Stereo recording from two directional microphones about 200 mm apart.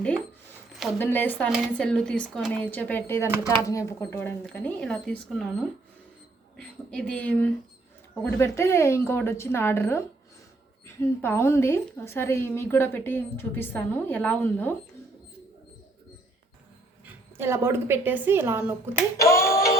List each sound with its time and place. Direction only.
0.9 s a woman's voice: 10° left (ahead or behind)
6.9 s a woman's voice: 5° left (ahead or behind)
17.1 s a woman's voice: 10° right (ahead or behind)
19.1 s music: 15° left (ahead or behind)